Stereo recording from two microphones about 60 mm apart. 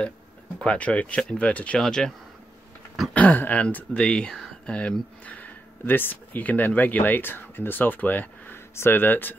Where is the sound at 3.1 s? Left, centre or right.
Left.